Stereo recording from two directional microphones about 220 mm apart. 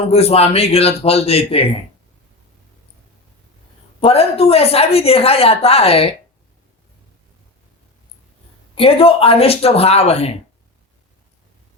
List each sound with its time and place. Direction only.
0.1 s a woman's voice: 30° left (ahead or behind)
4.0 s a woman's voice: 25° left (ahead or behind)
8.7 s a woman's voice: 25° left (ahead or behind)